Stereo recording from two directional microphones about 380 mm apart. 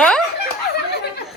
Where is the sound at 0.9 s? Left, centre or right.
Left.